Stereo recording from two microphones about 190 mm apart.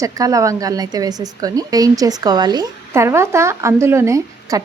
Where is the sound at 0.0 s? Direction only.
15° right (ahead or behind).